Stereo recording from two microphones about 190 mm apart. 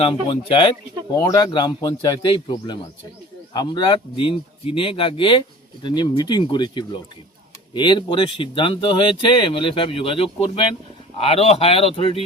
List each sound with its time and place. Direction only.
0.0 s speech: 30° left (ahead or behind)